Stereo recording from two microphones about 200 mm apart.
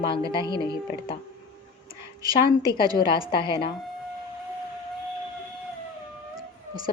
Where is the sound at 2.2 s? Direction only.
20° right (ahead or behind).